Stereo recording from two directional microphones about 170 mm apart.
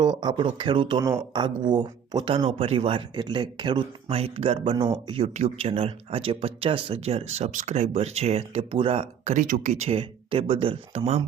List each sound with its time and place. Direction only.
0.2 s speech: 25° right (ahead or behind)
9.3 s speech: 50° right (ahead or behind)
9.8 s speech: 35° right (ahead or behind)